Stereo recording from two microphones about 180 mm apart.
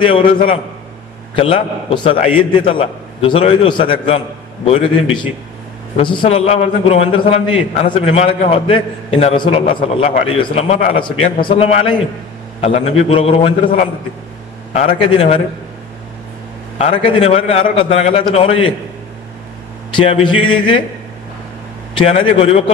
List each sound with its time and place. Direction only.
1.3 s a man's voice: 30° left (ahead or behind)
16.7 s a man's voice: 35° left (ahead or behind)
20.0 s a man's voice: 30° left (ahead or behind)
21.9 s a man's voice: 35° left (ahead or behind)